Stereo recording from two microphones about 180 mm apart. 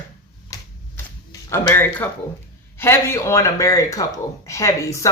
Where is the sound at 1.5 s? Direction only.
15° left (ahead or behind).